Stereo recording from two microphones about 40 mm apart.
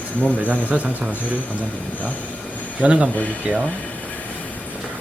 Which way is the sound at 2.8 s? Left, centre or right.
Right.